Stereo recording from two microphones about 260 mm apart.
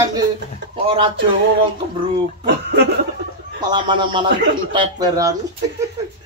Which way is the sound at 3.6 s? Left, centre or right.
Centre.